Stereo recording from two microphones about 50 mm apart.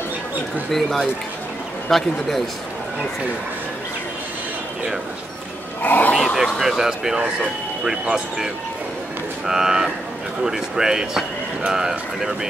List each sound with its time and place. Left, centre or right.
0.7 s a man's voice: centre
5.8 s a sound: left
6.3 s speech: centre
9.5 s speech: centre